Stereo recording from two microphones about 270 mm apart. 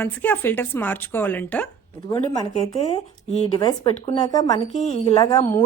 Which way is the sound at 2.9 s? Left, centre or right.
Left.